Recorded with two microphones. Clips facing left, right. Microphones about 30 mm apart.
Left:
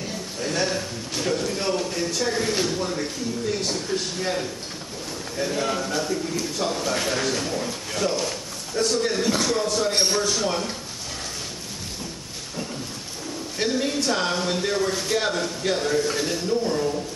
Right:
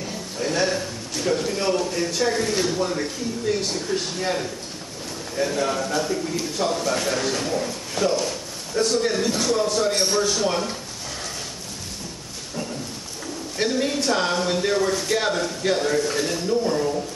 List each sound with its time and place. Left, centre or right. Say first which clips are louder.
0.0 s a sound: right 2 dB; centre
1.2 s speech: right 3 dB; centre
2.8 s speech: right 2 dB; centre
13.6 s speech: right 1 dB; centre